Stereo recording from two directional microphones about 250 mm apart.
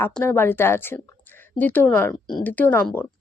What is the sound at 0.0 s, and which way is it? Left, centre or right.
Speech, centre.